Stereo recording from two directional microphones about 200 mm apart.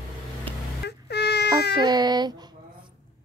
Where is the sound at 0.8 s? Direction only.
55° left (ahead or behind).